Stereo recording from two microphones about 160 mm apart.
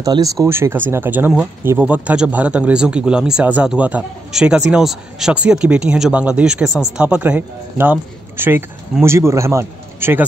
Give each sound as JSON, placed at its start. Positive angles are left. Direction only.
{"t": 0.0, "sound": "a man's voice", "side_deg": -20}